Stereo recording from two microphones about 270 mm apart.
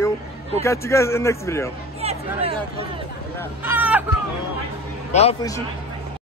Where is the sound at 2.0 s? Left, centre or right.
Right.